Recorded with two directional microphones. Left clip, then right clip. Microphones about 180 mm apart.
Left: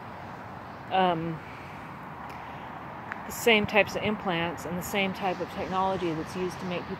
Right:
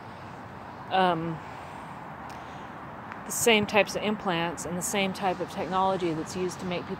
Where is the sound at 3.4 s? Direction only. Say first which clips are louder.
Even; 10° right (ahead or behind).